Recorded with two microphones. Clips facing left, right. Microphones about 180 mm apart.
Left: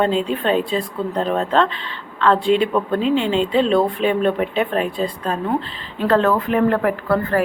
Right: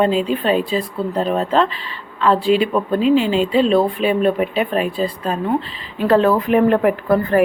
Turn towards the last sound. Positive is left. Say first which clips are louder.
# right 3 dB
turn(degrees=-15)  # may be behind; listen again after turning